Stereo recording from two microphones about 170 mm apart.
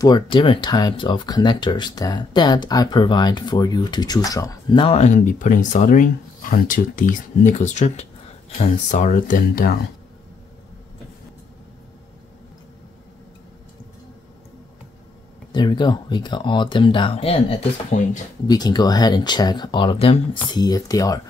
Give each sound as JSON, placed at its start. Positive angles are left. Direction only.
{"t": 0.0, "sound": "speech", "side_deg": 25}
{"t": 15.5, "sound": "speech", "side_deg": 25}
{"t": 18.5, "sound": "speech", "side_deg": 25}
{"t": 20.5, "sound": "speech", "side_deg": 20}